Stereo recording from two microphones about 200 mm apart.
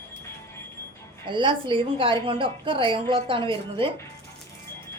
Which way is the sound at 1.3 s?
25° right (ahead or behind).